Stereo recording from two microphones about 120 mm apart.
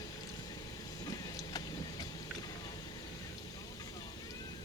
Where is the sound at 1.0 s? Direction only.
30° left (ahead or behind).